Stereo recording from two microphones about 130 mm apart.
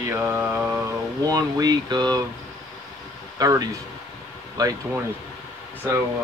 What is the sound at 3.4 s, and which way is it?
Speech, 30° right (ahead or behind).